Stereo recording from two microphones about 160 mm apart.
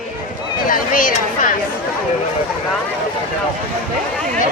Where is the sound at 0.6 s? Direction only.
60° left (ahead or behind).